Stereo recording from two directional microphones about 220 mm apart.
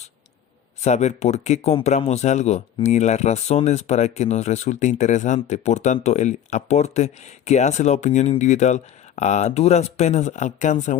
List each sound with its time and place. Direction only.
0.8 s speech: 30° left (ahead or behind)